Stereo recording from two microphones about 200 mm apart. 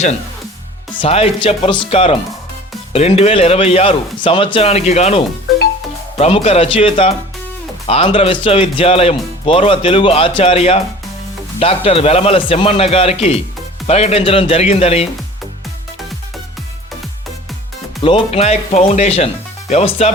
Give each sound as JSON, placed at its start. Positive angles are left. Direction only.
{"t": 0.9, "sound": "speech", "side_deg": 30}
{"t": 18.0, "sound": "speech", "side_deg": 30}